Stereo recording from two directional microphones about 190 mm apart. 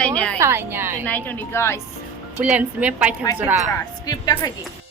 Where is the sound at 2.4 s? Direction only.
5° right (ahead or behind).